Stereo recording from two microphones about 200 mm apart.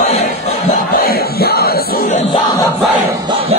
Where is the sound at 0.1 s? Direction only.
30° left (ahead or behind).